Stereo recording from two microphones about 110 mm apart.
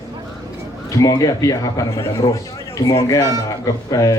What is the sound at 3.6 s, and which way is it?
Speech, 35° left (ahead or behind).